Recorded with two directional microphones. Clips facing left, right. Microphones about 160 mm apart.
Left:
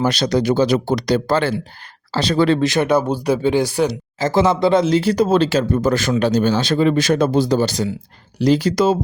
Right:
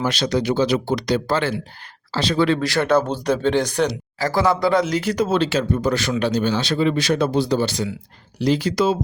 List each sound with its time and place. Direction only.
0.0 s speech: 40° left (ahead or behind)
2.6 s speech: 20° left (ahead or behind)
4.2 s speech: 20° left (ahead or behind); by 9.0 s 45° left (ahead or behind)